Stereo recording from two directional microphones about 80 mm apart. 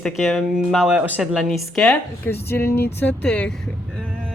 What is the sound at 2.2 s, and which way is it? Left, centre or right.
Speech, left.